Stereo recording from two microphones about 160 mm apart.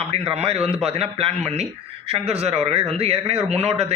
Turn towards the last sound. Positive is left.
turn(degrees=-40)  # may be behind; listen again after turning